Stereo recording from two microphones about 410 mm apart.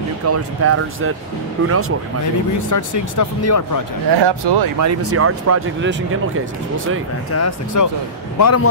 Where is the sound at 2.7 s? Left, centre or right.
Left.